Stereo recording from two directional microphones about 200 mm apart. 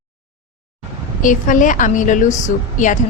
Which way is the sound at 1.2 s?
40° left (ahead or behind).